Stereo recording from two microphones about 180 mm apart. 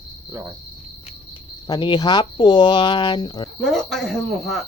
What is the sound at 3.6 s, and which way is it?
Speech, centre (ahead or behind).